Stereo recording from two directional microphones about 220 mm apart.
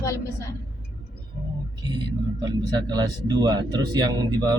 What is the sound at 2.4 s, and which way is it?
A man's voice, 20° right (ahead or behind).